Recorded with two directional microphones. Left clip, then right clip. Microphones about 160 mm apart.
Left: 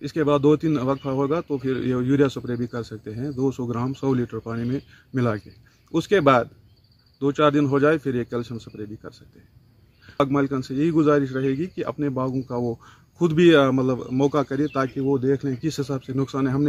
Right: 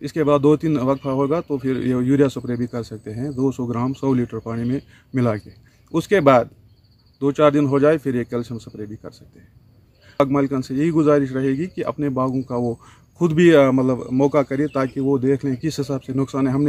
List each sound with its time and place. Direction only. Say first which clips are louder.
0.0 s a man's voice: right 3 dB; 10° right (ahead or behind)